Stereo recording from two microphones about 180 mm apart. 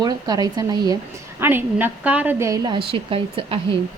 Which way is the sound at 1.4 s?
10° right (ahead or behind).